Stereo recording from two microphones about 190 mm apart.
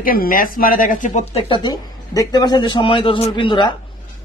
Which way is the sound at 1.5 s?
20° left (ahead or behind).